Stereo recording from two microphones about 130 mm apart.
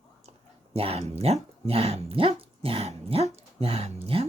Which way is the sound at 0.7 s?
50° right (ahead or behind).